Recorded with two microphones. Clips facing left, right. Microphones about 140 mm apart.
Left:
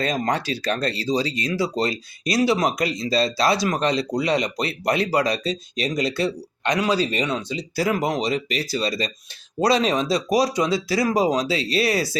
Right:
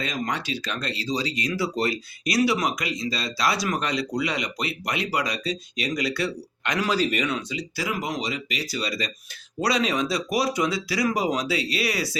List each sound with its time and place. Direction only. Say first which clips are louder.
0.0 s speech: left 6 dB; 35° left (ahead or behind)
7.9 s speech: left 7 dB; 45° left (ahead or behind)
8.2 s speech: left 6 dB; 35° left (ahead or behind)